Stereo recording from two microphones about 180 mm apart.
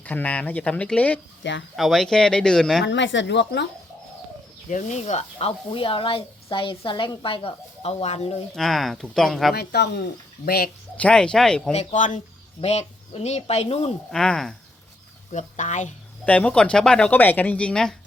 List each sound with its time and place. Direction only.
0.0 s speech: 10° left (ahead or behind)
2.8 s speech: 90° left; by 3.7 s 75° left (ahead or behind)
4.7 s speech: 40° left (ahead or behind)
8.5 s speech: centre (ahead or behind)
9.6 s speech: 65° left (ahead or behind)
10.9 s speech: 5° left (ahead or behind)
11.7 s speech: 35° left (ahead or behind)
14.1 s speech: 5° left (ahead or behind)
15.3 s speech: 40° left (ahead or behind)
16.2 s speech: 10° left (ahead or behind)